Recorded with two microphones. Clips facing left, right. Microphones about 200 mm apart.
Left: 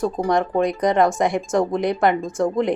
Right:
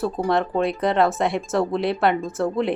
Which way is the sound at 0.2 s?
15° left (ahead or behind).